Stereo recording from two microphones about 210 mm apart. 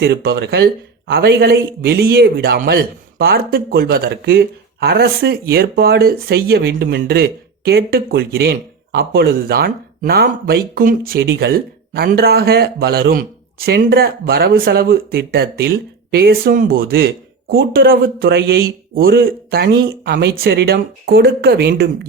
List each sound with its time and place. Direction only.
0.0 s a man's voice: 50° right (ahead or behind)